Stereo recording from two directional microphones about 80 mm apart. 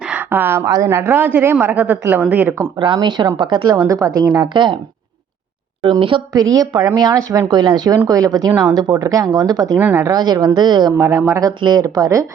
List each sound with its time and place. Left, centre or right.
0.0 s a sound: centre
0.3 s a woman's voice: right
2.7 s a woman's voice: right
6.0 s speech: right
6.3 s speech: right
7.4 s speech: right
8.0 s speech: right
9.7 s a woman's voice: right
10.1 s a woman's voice: right
10.9 s speech: right